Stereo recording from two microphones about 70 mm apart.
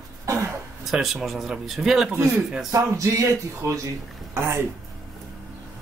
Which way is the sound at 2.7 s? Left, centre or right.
Right.